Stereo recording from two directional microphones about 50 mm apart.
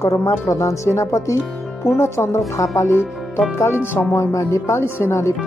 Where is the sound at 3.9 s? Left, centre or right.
Left.